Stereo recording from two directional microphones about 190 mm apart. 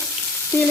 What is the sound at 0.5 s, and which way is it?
Frying, 15° left (ahead or behind).